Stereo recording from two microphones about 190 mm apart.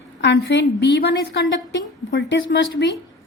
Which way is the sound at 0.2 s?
65° left (ahead or behind).